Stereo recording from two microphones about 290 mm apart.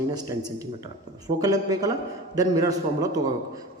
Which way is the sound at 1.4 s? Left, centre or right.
Centre.